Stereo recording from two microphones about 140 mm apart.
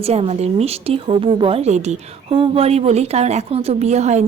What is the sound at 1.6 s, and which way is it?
Speech, 55° right (ahead or behind).